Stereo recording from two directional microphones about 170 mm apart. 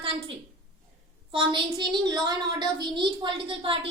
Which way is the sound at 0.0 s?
35° right (ahead or behind).